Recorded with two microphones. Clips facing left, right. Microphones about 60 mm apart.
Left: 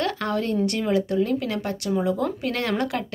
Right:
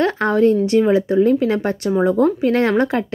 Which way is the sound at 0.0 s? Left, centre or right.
Right.